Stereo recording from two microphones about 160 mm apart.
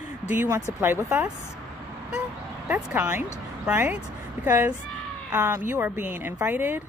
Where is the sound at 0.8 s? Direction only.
15° right (ahead or behind).